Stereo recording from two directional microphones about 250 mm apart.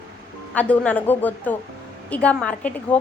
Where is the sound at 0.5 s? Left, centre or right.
Centre.